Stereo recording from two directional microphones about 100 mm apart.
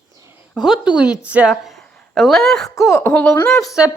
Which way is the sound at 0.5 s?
5° right (ahead or behind).